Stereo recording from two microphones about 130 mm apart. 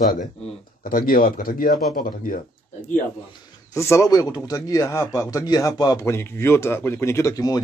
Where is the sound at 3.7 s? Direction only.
25° left (ahead or behind).